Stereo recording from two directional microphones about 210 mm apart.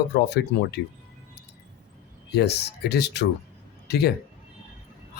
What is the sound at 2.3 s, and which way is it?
A man's voice, 50° left (ahead or behind).